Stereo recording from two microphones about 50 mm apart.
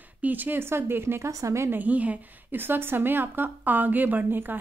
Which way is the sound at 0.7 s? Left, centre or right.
Right.